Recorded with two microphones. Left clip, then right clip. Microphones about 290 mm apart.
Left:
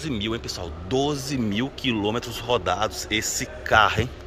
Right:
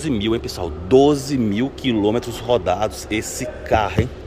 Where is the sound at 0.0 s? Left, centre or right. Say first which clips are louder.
Right 7 dB; centre.